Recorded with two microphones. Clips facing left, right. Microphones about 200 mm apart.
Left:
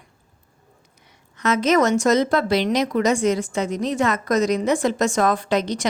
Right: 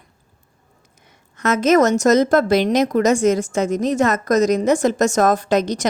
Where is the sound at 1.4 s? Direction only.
45° right (ahead or behind).